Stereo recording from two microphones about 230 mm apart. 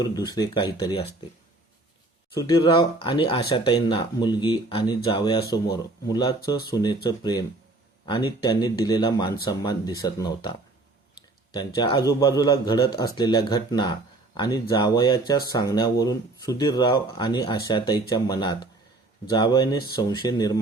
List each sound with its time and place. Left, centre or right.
0.0 s speech: centre
2.4 s speech: centre